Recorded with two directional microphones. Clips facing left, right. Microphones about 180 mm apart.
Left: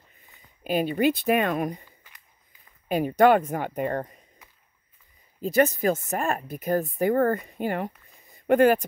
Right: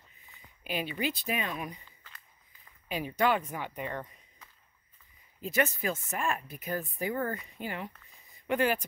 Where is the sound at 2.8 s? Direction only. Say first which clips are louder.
Left 10 dB; 50° left (ahead or behind).